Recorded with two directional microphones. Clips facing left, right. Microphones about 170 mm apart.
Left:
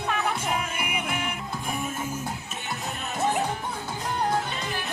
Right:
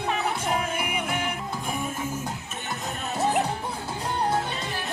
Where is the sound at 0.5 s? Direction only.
35° right (ahead or behind).